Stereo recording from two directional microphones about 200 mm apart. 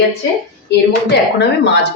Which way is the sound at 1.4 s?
55° left (ahead or behind).